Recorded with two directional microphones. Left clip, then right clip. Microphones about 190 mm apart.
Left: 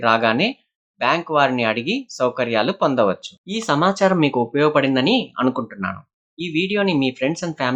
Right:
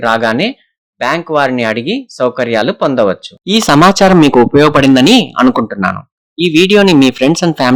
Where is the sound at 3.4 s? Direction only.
60° right (ahead or behind).